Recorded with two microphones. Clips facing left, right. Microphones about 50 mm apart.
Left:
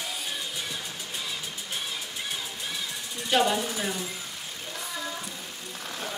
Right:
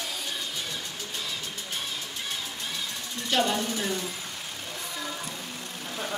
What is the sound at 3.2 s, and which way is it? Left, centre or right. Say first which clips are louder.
Speech: left 2 dB; centre.